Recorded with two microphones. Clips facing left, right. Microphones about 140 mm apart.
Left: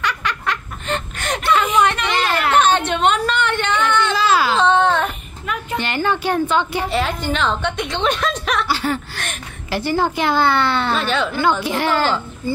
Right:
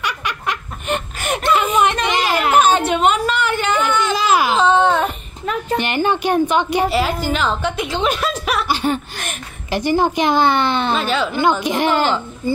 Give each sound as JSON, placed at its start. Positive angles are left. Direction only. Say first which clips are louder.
{"t": 0.0, "sound": "snicker", "louder": "left 1 dB", "side_deg": -15}
{"t": 2.0, "sound": "a sound", "louder": "right 1 dB", "side_deg": -15}
{"t": 4.6, "sound": "baby cry", "louder": "right 1 dB", "side_deg": -5}
{"t": 5.5, "sound": "a sound", "louder": "right 4 dB", "side_deg": -35}
{"t": 5.8, "sound": "a woman's voice", "louder": "right 1 dB", "side_deg": -15}
{"t": 6.9, "sound": "a woman's voice", "louder": "right 2 dB", "side_deg": -5}
{"t": 8.6, "sound": "a sound", "louder": "right 2 dB", "side_deg": -20}
{"t": 9.7, "sound": "a woman's voice", "louder": "right 3 dB", "side_deg": -15}
{"t": 11.0, "sound": "a woman's voice", "louder": "right 1 dB", "side_deg": 0}
{"t": 11.6, "sound": "a woman's voice", "louder": "right 2 dB", "side_deg": -20}